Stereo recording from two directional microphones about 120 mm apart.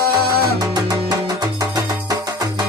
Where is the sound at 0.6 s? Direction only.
35° right (ahead or behind).